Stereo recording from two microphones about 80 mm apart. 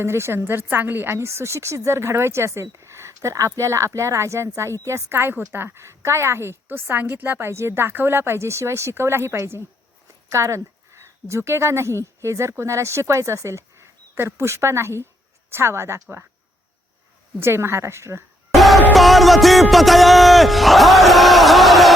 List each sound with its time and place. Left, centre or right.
0.0 s a woman's voice: right
17.4 s a woman's voice: right
18.5 s music: centre
19.7 s a sound: centre